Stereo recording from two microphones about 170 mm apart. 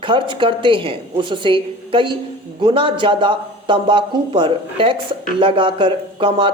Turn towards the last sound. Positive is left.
turn(degrees=-30)  # may be behind; listen again after turning